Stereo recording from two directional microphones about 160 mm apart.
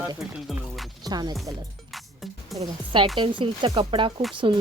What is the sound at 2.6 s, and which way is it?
A woman's voice, 30° right (ahead or behind).